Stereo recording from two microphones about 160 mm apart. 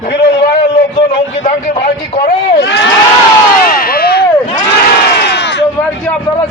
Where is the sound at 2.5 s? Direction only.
90° left.